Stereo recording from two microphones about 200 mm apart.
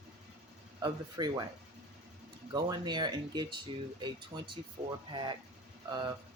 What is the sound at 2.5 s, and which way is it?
Speech, 20° right (ahead or behind).